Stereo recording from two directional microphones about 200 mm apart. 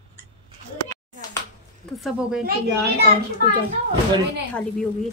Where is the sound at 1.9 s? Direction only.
Centre (ahead or behind).